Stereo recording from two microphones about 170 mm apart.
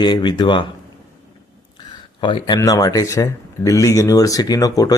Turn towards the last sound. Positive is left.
turn(degrees=20)  # may be behind; listen again after turning